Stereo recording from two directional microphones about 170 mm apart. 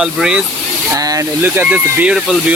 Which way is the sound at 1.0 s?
20° right (ahead or behind).